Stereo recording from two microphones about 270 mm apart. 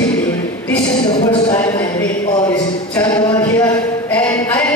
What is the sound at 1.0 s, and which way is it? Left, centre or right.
A man's voice, centre.